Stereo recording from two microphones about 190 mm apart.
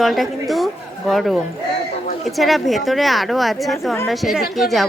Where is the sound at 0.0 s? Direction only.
Centre (ahead or behind).